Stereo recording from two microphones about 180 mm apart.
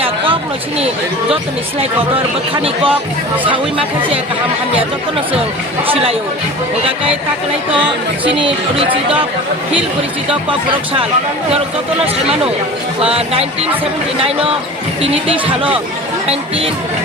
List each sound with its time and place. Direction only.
2.6 s speech: 30° right (ahead or behind)
5.9 s speech: 30° right (ahead or behind)
8.4 s speech: 30° right (ahead or behind)
13.0 s speech: 35° right (ahead or behind)